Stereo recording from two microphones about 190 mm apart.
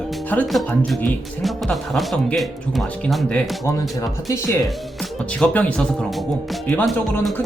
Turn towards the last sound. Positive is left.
turn(degrees=5)  # may be behind; listen again after turning